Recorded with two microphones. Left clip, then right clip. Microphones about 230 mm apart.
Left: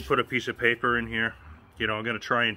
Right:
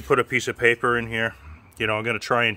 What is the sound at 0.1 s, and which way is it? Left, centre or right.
Speech, right.